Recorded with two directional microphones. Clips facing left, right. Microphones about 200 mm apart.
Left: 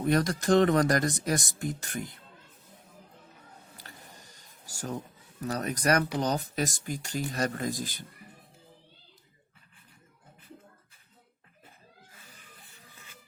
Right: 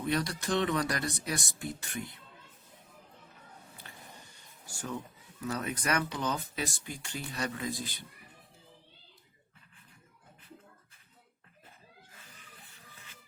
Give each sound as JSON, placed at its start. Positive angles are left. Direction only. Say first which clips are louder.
{"t": 0.0, "sound": "speech", "louder": "left 6 dB", "side_deg": 45}
{"t": 3.8, "sound": "speech", "louder": "left 1 dB", "side_deg": 40}